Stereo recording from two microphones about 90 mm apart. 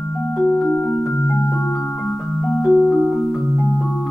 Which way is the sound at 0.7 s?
20° left (ahead or behind).